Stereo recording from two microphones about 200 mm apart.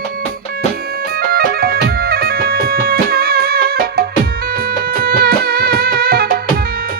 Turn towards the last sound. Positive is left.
turn(degrees=-50)  # may be behind; listen again after turning